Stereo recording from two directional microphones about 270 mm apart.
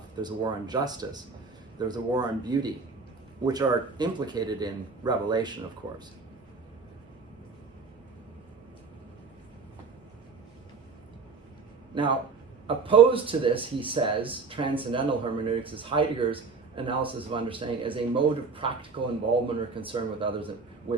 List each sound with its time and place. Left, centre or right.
0.2 s a man's voice: centre
11.9 s a man's voice: centre